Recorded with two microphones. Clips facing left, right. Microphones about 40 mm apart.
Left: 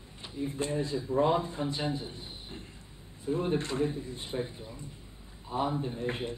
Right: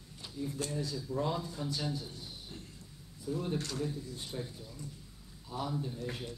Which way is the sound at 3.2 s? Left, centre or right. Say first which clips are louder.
Left 6 dB; left.